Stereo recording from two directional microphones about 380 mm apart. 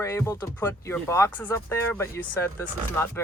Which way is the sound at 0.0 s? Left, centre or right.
Centre.